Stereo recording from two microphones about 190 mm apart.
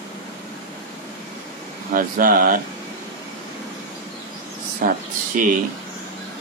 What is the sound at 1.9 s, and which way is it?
Speech, 45° right (ahead or behind).